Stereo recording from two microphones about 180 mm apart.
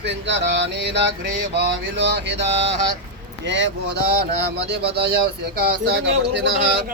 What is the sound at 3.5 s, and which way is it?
Mantra, 80° right.